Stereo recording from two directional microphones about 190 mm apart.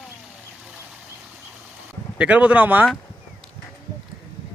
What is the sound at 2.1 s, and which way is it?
Speech, 5° right (ahead or behind).